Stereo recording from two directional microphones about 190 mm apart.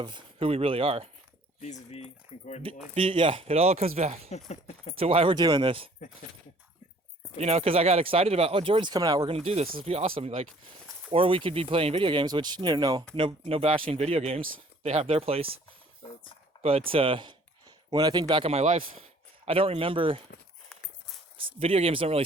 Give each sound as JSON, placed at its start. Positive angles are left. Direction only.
{"t": 0.0, "sound": "speech", "side_deg": -25}
{"t": 1.6, "sound": "speech", "side_deg": 35}
{"t": 2.9, "sound": "speech", "side_deg": -30}
{"t": 4.3, "sound": "speech", "side_deg": 35}
{"t": 4.9, "sound": "speech", "side_deg": -30}
{"t": 7.3, "sound": "speech", "side_deg": -35}
{"t": 16.6, "sound": "speech", "side_deg": -30}
{"t": 21.3, "sound": "speech", "side_deg": -30}